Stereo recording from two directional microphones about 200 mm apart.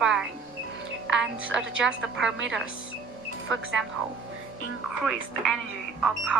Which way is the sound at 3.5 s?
70° right (ahead or behind).